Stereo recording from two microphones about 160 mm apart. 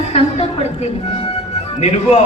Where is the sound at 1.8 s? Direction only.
40° left (ahead or behind).